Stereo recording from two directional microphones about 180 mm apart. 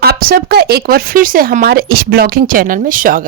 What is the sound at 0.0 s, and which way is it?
A woman's voice, 60° right (ahead or behind).